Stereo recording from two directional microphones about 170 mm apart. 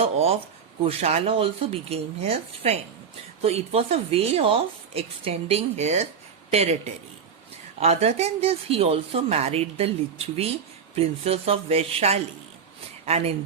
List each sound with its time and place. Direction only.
0.0 s speech: 35° right (ahead or behind)
7.8 s speech: 40° right (ahead or behind)